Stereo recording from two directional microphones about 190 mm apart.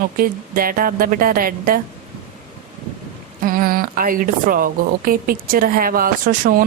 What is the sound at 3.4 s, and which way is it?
A woman's voice, 50° right (ahead or behind).